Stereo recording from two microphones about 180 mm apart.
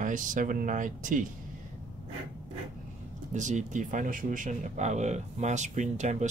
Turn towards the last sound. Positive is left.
turn(degrees=-40)  # may be behind; listen again after turning